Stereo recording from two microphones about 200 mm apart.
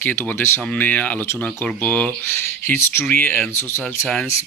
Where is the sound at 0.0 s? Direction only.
10° left (ahead or behind).